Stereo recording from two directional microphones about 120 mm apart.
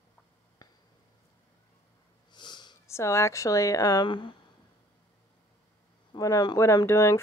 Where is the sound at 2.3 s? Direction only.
40° left (ahead or behind).